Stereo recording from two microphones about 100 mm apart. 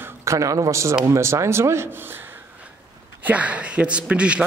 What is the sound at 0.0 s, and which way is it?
A man's voice, 30° right (ahead or behind).